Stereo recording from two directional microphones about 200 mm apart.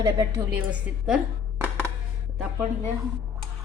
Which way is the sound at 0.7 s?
5° right (ahead or behind).